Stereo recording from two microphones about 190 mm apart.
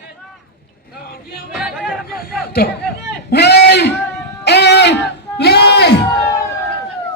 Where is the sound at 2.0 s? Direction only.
50° left (ahead or behind).